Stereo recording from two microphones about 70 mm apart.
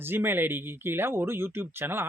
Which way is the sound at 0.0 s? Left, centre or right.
Right.